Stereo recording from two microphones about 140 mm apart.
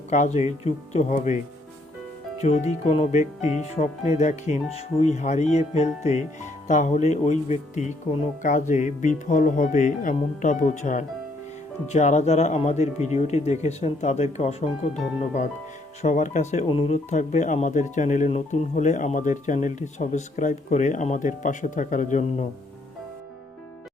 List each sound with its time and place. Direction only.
0.1 s speech: 55° left (ahead or behind)
2.4 s speech: 50° left (ahead or behind)
16.6 s speech: 40° left (ahead or behind); by 22.4 s 60° left (ahead or behind)